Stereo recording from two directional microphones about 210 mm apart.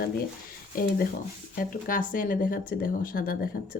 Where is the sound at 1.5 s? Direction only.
40° left (ahead or behind).